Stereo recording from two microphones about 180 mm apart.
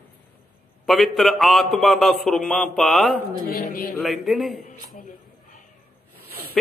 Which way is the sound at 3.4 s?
55° left (ahead or behind).